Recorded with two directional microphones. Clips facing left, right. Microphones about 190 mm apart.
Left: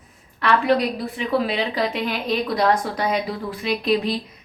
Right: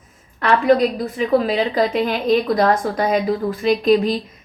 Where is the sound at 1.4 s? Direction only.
45° right (ahead or behind).